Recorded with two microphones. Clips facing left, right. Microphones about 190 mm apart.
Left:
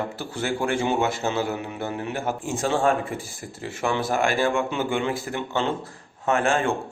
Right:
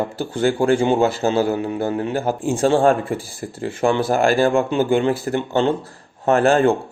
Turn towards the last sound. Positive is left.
turn(degrees=-35)  # may be behind; listen again after turning